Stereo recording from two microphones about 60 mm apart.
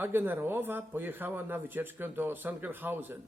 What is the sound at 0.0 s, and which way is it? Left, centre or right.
A man's voice, right.